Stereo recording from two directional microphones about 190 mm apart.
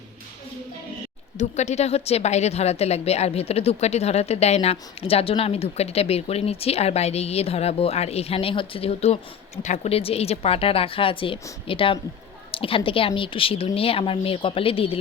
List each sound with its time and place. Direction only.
1.4 s a woman's voice: 35° left (ahead or behind)